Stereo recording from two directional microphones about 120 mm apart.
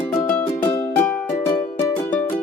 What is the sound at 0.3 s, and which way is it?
Music, 20° left (ahead or behind).